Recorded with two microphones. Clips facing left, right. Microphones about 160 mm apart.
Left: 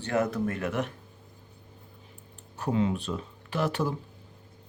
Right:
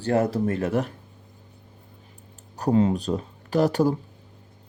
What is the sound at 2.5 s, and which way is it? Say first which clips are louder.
Speech: right 6 dB; 40° right (ahead or behind).